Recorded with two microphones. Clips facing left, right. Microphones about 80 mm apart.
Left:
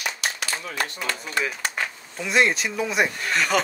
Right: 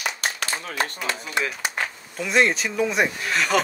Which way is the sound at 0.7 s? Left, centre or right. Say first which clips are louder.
Right 2 dB; right.